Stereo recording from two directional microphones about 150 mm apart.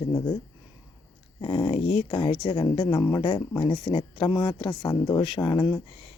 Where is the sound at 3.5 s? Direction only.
35° left (ahead or behind).